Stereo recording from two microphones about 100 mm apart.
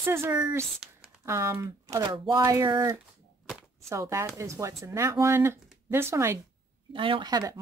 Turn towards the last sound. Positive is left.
turn(degrees=-40)  # may be behind; listen again after turning